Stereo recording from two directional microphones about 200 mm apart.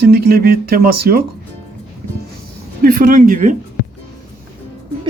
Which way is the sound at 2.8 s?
45° right (ahead or behind).